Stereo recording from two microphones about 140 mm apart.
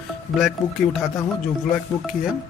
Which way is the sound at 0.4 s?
Centre (ahead or behind).